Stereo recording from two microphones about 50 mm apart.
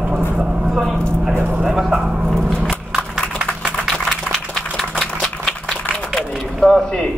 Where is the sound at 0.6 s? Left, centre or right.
Centre.